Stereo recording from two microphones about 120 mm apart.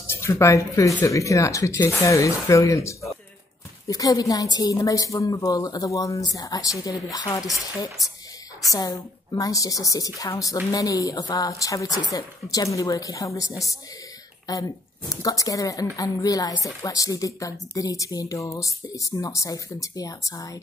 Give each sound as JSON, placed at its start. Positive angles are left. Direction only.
{"t": 0.0, "sound": "speech", "side_deg": 20}
{"t": 8.7, "sound": "a woman's voice", "side_deg": 30}